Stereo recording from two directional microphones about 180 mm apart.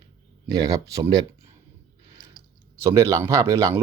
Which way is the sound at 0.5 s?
20° right (ahead or behind).